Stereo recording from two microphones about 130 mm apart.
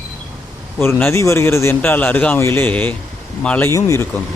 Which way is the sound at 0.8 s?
15° left (ahead or behind).